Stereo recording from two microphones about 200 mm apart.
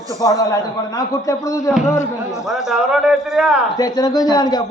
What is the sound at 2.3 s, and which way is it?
Speech, centre (ahead or behind).